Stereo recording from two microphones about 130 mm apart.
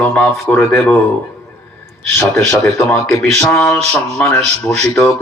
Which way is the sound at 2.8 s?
5° left (ahead or behind).